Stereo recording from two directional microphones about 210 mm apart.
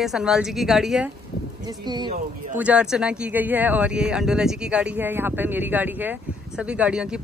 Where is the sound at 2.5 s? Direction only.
5° right (ahead or behind).